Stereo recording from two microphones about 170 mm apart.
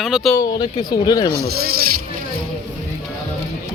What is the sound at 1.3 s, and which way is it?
Speech, 65° right (ahead or behind).